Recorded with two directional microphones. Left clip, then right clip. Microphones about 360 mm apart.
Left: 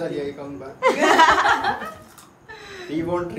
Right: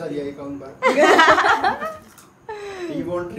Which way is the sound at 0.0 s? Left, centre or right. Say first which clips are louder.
Left 1 dB; centre.